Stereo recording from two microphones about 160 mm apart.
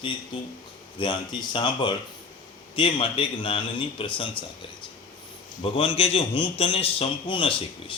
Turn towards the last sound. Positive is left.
turn(degrees=35)  # may be behind; listen again after turning